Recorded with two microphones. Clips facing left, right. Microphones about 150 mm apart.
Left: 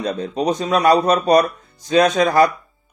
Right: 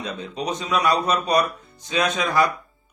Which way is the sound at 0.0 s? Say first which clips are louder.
Left 8 dB; 40° left (ahead or behind).